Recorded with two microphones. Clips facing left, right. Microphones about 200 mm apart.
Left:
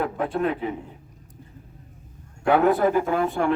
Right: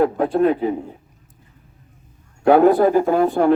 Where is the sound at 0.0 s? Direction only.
35° right (ahead or behind).